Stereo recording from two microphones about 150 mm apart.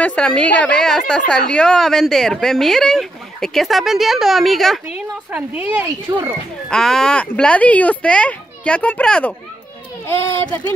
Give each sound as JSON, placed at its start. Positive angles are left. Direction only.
{"t": 0.0, "sound": "a woman's voice", "side_deg": 5}
{"t": 6.1, "sound": "a child's voice", "side_deg": -25}
{"t": 6.7, "sound": "a child's voice", "side_deg": 5}